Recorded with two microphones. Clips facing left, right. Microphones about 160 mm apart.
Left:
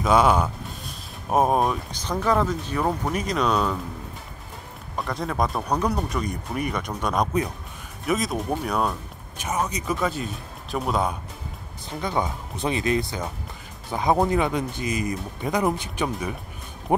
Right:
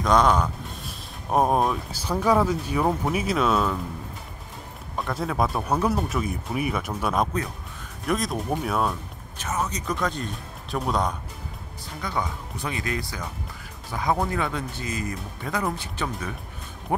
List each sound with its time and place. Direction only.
0.0 s speech: 5° left (ahead or behind)
4.9 s speech: centre (ahead or behind)
9.4 s speech: 15° left (ahead or behind)
12.0 s speech: 25° left (ahead or behind)